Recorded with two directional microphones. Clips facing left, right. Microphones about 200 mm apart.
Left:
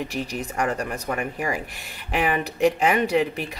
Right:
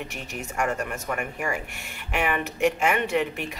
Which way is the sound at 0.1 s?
35° left (ahead or behind).